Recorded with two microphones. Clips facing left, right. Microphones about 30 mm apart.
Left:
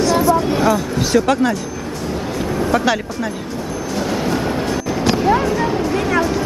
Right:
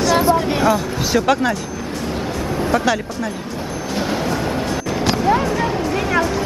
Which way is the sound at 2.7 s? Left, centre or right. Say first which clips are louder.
Left 1 dB; centre.